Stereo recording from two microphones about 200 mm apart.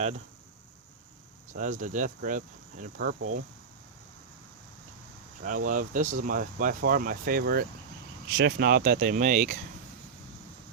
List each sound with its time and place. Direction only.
1.5 s speech: 40° right (ahead or behind)
5.4 s speech: 40° right (ahead or behind)